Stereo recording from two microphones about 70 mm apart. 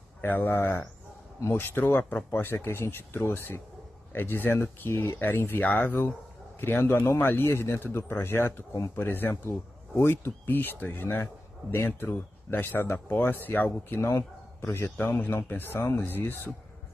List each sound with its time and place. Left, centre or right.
0.2 s a man's voice: left